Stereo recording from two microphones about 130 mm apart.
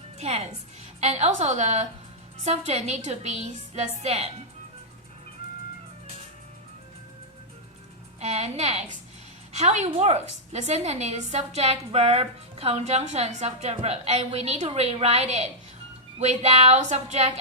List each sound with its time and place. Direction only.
0.2 s a woman's voice: 50° right (ahead or behind)
8.2 s a woman's voice: 55° right (ahead or behind)